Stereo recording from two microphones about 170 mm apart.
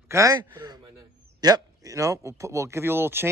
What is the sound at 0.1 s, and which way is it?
A man's voice, 20° right (ahead or behind).